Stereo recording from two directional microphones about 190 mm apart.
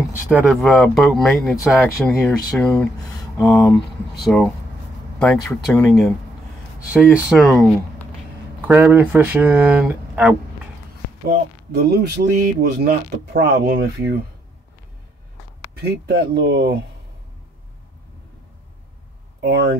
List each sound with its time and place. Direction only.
0.3 s speech: 5° right (ahead or behind)
5.5 s speech: 15° left (ahead or behind)
7.1 s speech: centre (ahead or behind)
8.5 s speech: 10° right (ahead or behind)
11.7 s speech: 55° right (ahead or behind)
15.9 s speech: 60° right (ahead or behind)
19.4 s speech: 60° right (ahead or behind)